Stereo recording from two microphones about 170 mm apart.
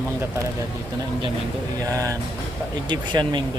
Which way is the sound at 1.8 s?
20° right (ahead or behind).